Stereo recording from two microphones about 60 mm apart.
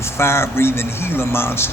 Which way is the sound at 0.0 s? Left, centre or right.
Left.